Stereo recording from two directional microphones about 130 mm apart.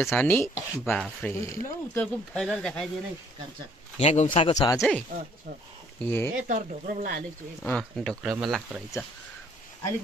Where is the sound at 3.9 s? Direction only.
60° left (ahead or behind).